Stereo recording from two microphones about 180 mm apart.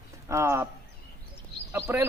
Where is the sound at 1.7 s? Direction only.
15° right (ahead or behind).